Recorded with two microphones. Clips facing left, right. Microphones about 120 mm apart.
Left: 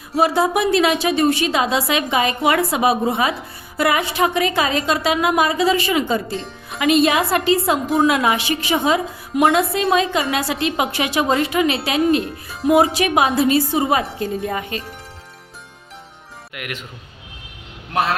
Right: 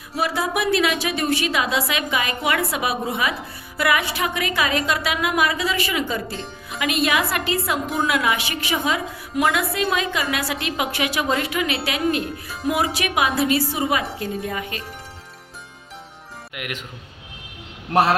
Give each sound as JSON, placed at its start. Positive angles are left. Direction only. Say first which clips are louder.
{"t": 0.2, "sound": "a woman's voice", "louder": "left 6 dB", "side_deg": 25}
{"t": 6.3, "sound": "music", "louder": "left 4 dB", "side_deg": 0}
{"t": 6.7, "sound": "a woman's voice", "louder": "left 6 dB", "side_deg": 30}
{"t": 16.6, "sound": "speech", "louder": "left 1 dB", "side_deg": -15}
{"t": 17.9, "sound": "a man's voice", "louder": "right 3 dB", "side_deg": -40}